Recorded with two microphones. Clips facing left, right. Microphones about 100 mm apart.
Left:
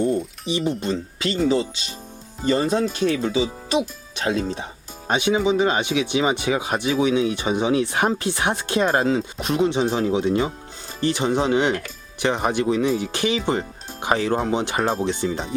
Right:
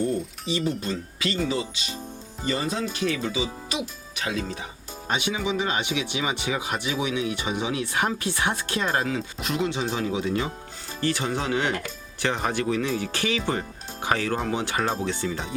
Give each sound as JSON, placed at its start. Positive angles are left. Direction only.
{"t": 0.0, "sound": "speech", "side_deg": 20}